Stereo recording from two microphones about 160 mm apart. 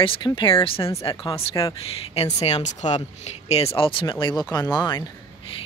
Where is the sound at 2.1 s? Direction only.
40° left (ahead or behind).